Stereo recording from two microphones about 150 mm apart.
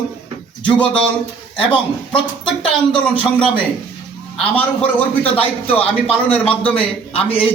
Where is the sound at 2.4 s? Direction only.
35° left (ahead or behind).